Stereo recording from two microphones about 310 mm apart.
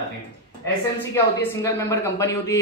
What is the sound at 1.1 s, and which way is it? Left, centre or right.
Speech, centre.